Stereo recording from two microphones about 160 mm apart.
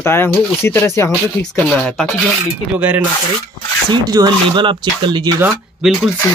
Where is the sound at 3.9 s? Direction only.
25° right (ahead or behind).